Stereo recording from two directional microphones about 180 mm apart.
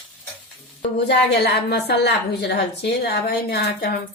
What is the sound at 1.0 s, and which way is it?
A woman's voice, 70° left (ahead or behind).